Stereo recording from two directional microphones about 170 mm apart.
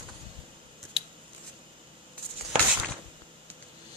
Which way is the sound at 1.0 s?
30° left (ahead or behind).